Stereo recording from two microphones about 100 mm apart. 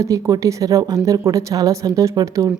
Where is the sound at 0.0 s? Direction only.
30° right (ahead or behind).